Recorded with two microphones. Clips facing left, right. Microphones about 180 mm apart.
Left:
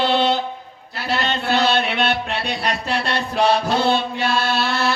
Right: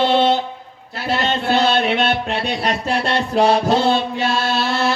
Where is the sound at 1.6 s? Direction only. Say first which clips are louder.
Right 2 dB; 45° right (ahead or behind).